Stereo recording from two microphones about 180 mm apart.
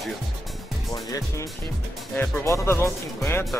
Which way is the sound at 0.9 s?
20° left (ahead or behind).